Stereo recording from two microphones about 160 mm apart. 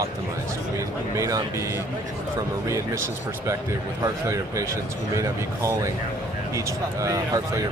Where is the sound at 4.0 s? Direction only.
20° right (ahead or behind).